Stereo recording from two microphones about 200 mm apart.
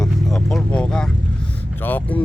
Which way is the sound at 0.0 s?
Centre (ahead or behind).